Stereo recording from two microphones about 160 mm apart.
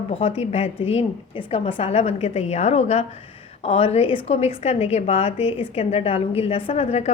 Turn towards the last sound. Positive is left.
turn(degrees=45)  # may be behind; listen again after turning